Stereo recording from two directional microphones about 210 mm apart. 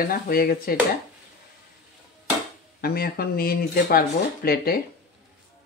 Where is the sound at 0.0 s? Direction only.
45° left (ahead or behind).